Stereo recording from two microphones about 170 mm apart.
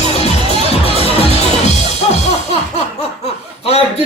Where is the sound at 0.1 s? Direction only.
35° left (ahead or behind).